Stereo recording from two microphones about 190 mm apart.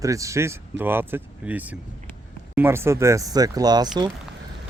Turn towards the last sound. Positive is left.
turn(degrees=-20)  # may be behind; listen again after turning